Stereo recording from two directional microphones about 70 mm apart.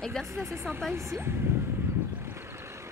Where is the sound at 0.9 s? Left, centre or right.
Right.